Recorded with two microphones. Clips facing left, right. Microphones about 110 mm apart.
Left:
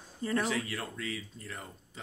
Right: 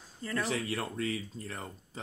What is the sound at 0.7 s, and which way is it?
Speech, 35° right (ahead or behind).